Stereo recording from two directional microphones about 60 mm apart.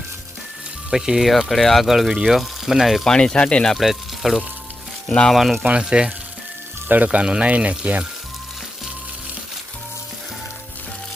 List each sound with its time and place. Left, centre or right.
0.9 s speech: centre
3.1 s speech: centre
3.8 s speech: centre
5.0 s speech: centre
5.3 s speech: centre
5.6 s speech: centre
6.8 s speech: right